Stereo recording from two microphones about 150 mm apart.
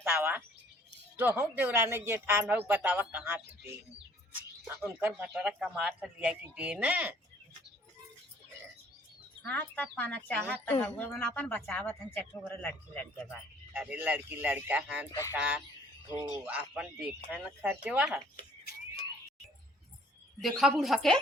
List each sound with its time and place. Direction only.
0.0 s a woman's voice: 15° right (ahead or behind)
4.6 s speech: 10° right (ahead or behind)
9.5 s speech: 10° left (ahead or behind)
13.7 s speech: 10° right (ahead or behind)
15.1 s speech: 20° left (ahead or behind)
15.4 s speech: 10° right (ahead or behind)
16.0 s speech: 25° left (ahead or behind)
16.5 s speech: 10° right (ahead or behind)
20.4 s speech: centre (ahead or behind)